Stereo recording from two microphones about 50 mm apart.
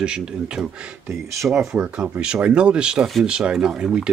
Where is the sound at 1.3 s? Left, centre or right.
Right.